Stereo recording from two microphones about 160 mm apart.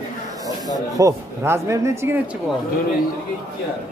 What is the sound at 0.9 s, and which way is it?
Speech, 20° right (ahead or behind).